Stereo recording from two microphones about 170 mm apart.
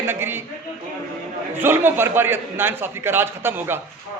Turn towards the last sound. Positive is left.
turn(degrees=-15)  # may be behind; listen again after turning